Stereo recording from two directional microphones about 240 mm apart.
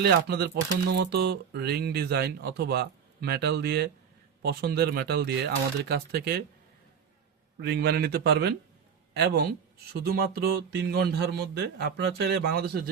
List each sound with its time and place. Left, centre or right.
0.0 s speech: right
7.6 s speech: right